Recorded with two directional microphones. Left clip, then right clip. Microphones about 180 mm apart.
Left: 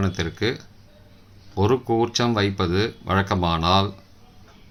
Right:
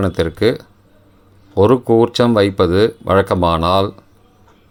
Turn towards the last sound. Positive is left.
turn(degrees=-45)  # may be behind; listen again after turning